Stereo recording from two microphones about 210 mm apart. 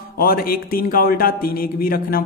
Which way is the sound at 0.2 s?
45° left (ahead or behind).